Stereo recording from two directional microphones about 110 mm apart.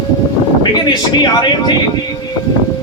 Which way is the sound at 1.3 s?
40° left (ahead or behind).